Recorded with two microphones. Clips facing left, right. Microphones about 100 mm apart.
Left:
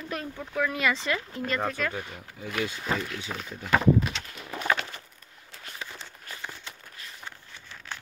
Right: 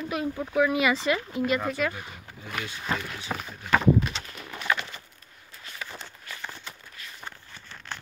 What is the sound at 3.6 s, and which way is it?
Speech, 5° left (ahead or behind).